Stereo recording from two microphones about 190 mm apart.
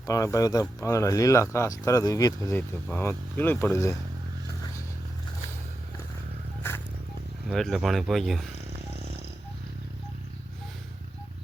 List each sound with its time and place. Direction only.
0.1 s speech: 15° left (ahead or behind)
6.6 s zipper: 10° left (ahead or behind)
7.5 s speech: centre (ahead or behind)